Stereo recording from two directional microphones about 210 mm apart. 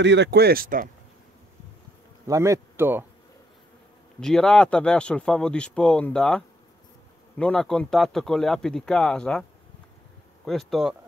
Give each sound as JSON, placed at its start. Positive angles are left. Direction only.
{"t": 0.0, "sound": "speech", "side_deg": -55}
{"t": 2.2, "sound": "speech", "side_deg": -15}
{"t": 4.2, "sound": "speech", "side_deg": 5}